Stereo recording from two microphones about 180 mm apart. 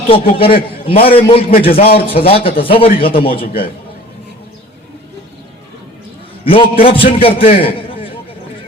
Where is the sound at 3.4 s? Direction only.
55° left (ahead or behind).